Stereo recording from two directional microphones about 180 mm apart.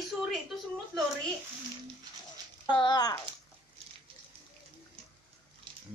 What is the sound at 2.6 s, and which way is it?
Speech, 25° left (ahead or behind).